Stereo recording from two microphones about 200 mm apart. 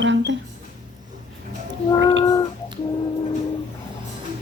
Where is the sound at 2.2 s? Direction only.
20° left (ahead or behind).